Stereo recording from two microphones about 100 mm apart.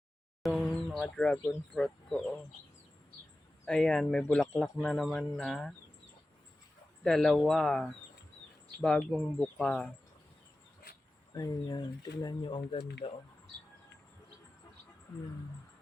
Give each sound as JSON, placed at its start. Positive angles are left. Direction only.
{"t": 0.4, "sound": "speech", "side_deg": 0}
{"t": 3.7, "sound": "speech", "side_deg": 5}
{"t": 7.0, "sound": "speech", "side_deg": 5}
{"t": 11.3, "sound": "speech", "side_deg": 40}
{"t": 13.0, "sound": "speech", "side_deg": 90}